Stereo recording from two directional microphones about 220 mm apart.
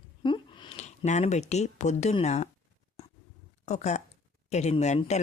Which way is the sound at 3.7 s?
30° left (ahead or behind).